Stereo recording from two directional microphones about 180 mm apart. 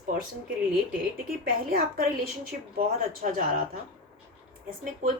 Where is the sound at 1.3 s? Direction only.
55° right (ahead or behind).